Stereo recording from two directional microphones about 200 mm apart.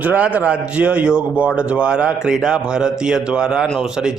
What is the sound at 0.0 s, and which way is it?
A man's voice, 5° right (ahead or behind).